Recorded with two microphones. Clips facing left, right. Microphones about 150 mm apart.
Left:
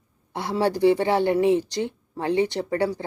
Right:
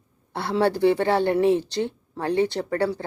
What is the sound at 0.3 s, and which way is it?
A woman's voice, 15° left (ahead or behind).